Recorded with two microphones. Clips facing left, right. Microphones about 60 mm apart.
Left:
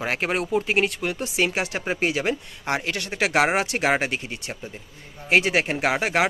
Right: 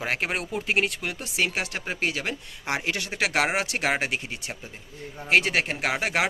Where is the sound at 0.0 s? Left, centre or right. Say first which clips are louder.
Left 3 dB; centre.